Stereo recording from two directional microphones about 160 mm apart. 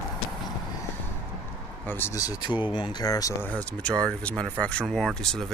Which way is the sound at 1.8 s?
15° left (ahead or behind).